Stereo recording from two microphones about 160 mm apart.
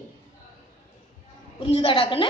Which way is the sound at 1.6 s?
35° left (ahead or behind).